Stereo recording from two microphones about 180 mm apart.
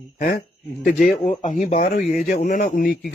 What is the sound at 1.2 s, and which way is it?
Speech, 45° left (ahead or behind).